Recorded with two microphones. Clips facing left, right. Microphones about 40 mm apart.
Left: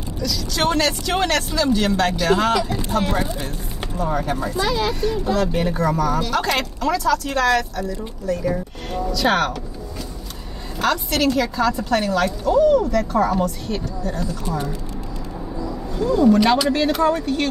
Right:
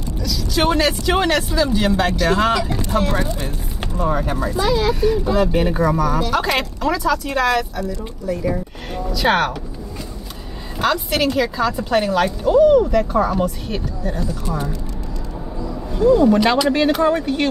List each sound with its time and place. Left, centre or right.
0.2 s speech: centre
3.8 s speech: centre
10.8 s speech: centre
16.3 s speech: centre